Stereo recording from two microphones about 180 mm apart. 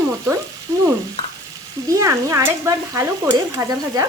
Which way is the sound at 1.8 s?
15° right (ahead or behind).